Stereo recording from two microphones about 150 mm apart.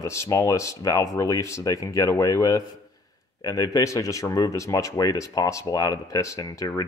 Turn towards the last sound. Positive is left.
turn(degrees=20)  # may be behind; listen again after turning